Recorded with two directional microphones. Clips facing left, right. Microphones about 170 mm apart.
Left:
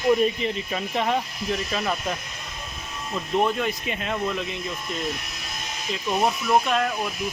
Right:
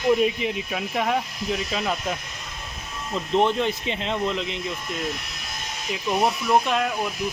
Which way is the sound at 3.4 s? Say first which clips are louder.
Right 2 dB; 25° right (ahead or behind).